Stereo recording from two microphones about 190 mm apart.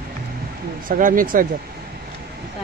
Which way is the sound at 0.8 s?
45° right (ahead or behind).